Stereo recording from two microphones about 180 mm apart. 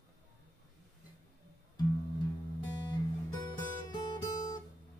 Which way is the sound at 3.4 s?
25° left (ahead or behind).